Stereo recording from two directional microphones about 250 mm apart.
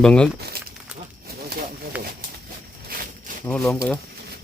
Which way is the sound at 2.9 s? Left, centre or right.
Right.